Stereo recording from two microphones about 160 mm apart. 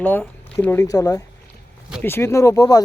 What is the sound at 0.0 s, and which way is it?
Speech, 10° left (ahead or behind).